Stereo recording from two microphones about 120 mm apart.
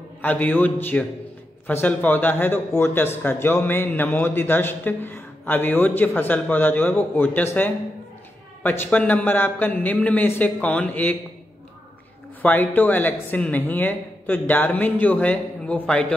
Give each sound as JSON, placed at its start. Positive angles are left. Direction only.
{"t": 0.2, "sound": "a man's voice", "side_deg": 15}
{"t": 12.4, "sound": "a man's voice", "side_deg": 15}